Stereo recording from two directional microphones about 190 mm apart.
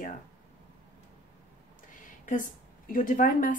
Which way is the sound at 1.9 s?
45° left (ahead or behind).